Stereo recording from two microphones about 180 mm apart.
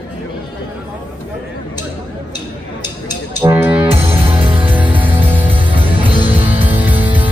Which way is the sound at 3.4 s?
15° right (ahead or behind).